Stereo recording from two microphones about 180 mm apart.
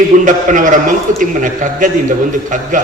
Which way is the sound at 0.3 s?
45° right (ahead or behind).